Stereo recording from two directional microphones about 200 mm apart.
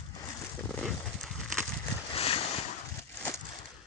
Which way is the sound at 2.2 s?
30° left (ahead or behind).